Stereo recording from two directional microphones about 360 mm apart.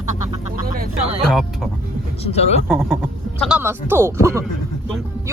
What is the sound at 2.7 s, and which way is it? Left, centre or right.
Speech, centre.